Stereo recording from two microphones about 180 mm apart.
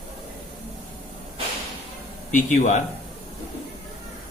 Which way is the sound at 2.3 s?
45° left (ahead or behind).